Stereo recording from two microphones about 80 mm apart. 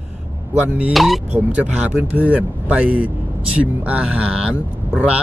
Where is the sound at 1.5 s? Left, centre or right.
Right.